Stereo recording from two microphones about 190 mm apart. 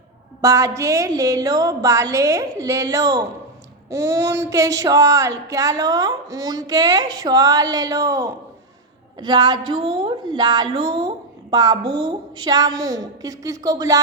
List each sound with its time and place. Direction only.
0.4 s a woman's voice: 15° right (ahead or behind)